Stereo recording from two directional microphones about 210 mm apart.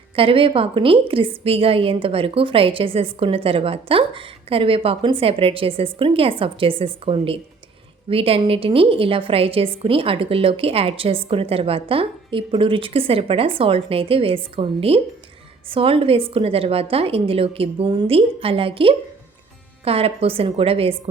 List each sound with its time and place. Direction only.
0.2 s a woman's voice: 25° right (ahead or behind)